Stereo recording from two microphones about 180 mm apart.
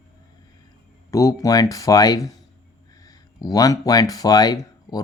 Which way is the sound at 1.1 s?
20° left (ahead or behind).